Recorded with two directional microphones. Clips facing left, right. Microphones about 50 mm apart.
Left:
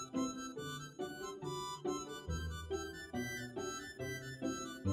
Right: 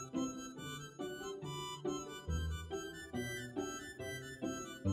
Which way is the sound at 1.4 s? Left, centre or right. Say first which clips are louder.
Left 2 dB; right.